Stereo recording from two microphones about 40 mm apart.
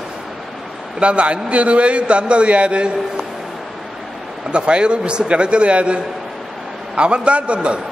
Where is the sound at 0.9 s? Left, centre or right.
Right.